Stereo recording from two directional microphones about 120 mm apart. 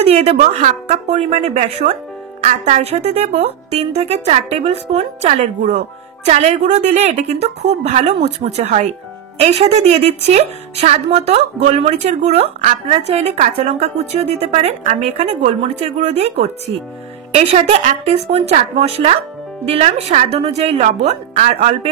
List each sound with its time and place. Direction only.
0.0 s a woman's voice: 60° right (ahead or behind); by 12.4 s 75° right (ahead or behind)
12.8 s a woman's voice: 60° right (ahead or behind); by 15.0 s 80° right
15.0 s a woman's voice: 65° right (ahead or behind)
17.8 s a woman's voice: 70° right (ahead or behind)